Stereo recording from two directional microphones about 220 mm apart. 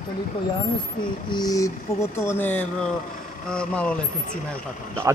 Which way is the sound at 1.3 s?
15° left (ahead or behind).